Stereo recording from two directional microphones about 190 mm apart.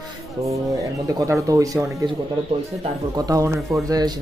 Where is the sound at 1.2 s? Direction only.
15° right (ahead or behind).